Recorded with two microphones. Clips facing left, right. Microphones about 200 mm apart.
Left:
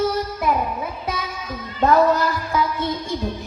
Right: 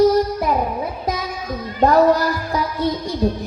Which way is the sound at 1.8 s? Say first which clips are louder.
Right 2 dB; 35° right (ahead or behind).